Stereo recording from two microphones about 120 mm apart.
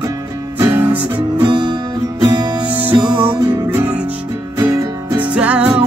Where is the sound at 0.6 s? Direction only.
15° right (ahead or behind).